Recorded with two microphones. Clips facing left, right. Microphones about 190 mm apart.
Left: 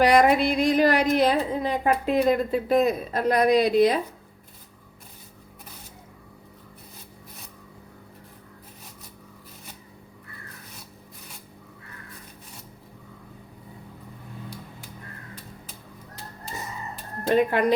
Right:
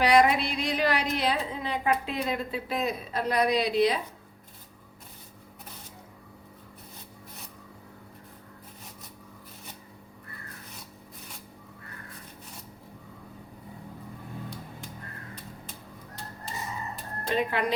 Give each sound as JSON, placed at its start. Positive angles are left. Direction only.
{"t": 0.0, "sound": "a woman's voice", "side_deg": 45}
{"t": 17.3, "sound": "a woman's voice", "side_deg": 50}